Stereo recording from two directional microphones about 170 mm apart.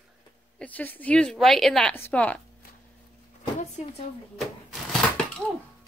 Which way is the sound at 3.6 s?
45° left (ahead or behind).